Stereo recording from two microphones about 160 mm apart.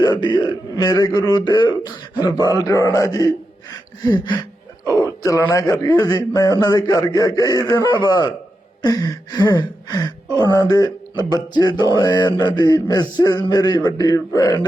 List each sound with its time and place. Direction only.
0.0 s a man's voice: 30° left (ahead or behind)